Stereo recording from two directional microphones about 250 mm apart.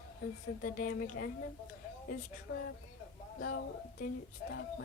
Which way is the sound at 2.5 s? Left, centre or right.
Left.